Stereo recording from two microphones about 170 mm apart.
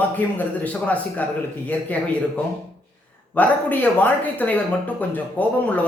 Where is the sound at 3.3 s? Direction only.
10° left (ahead or behind).